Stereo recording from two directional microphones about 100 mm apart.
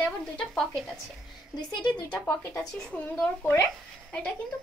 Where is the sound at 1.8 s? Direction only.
50° left (ahead or behind).